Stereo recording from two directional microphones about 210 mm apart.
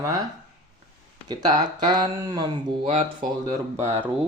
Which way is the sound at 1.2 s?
20° right (ahead or behind).